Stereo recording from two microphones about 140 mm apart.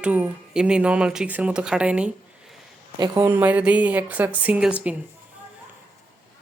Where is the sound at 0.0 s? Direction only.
10° right (ahead or behind).